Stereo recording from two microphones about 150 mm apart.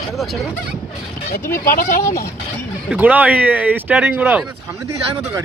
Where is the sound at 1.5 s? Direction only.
75° left (ahead or behind).